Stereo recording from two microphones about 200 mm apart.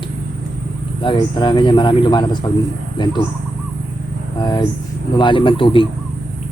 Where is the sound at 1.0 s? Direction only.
25° left (ahead or behind).